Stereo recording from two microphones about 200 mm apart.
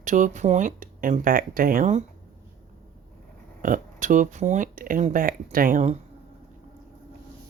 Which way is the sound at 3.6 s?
40° right (ahead or behind).